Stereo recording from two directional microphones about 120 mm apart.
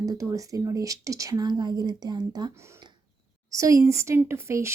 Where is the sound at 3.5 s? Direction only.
25° right (ahead or behind).